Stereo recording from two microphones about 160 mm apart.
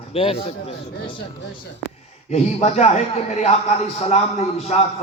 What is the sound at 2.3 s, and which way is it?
A man's voice, 40° left (ahead or behind).